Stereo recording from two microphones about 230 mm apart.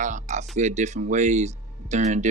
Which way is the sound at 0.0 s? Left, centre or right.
Right.